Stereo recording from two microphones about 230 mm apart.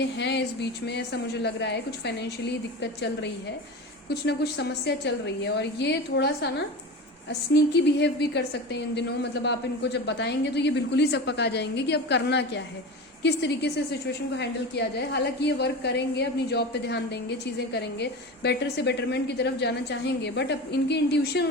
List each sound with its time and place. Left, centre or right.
0.0 s a woman's voice: left
4.1 s a woman's voice: left
7.5 s a woman's voice: left